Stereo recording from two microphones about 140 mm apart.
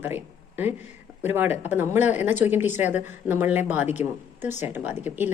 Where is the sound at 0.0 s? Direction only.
15° right (ahead or behind).